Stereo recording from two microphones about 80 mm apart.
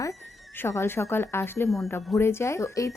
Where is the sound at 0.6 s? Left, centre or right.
Left.